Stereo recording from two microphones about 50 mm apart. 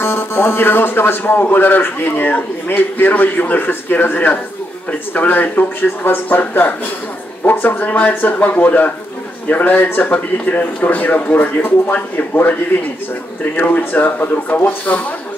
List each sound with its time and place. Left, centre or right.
0.0 s a man's voice: left
10.1 s speech: left
13.6 s speech: left
14.9 s speech: left